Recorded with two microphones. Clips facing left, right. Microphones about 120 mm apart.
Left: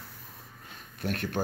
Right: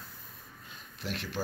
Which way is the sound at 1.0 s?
50° left (ahead or behind).